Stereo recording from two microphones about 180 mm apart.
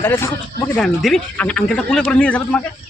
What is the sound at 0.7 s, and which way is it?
Speech, centre (ahead or behind).